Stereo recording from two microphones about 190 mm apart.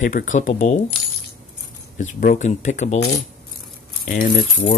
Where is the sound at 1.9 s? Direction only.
45° left (ahead or behind).